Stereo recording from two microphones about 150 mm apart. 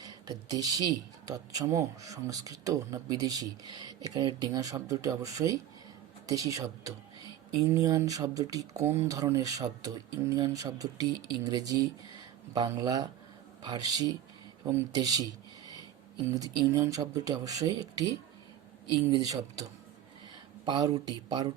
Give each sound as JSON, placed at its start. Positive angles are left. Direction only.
{"t": 0.0, "sound": "speech", "side_deg": -25}
{"t": 16.2, "sound": "speech", "side_deg": -25}
{"t": 19.1, "sound": "speech", "side_deg": -25}
{"t": 20.7, "sound": "speech", "side_deg": -25}